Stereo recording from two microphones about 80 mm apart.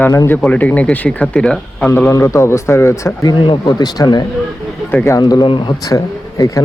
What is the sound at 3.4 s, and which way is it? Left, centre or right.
Speech, left.